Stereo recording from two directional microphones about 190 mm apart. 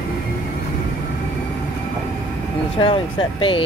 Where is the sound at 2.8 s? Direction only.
25° left (ahead or behind).